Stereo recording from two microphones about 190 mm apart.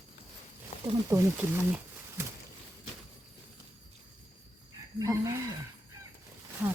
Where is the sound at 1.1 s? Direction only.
10° right (ahead or behind).